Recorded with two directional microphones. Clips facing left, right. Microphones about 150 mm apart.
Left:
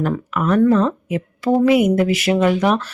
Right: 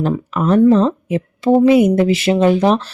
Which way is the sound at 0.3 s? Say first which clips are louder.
Right 3 dB; 30° right (ahead or behind).